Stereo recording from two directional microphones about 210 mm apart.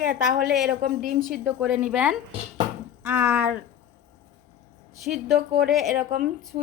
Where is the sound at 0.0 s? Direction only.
40° right (ahead or behind).